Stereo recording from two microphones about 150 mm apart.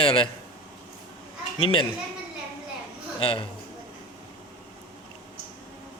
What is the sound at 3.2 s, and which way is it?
Speech, 40° left (ahead or behind).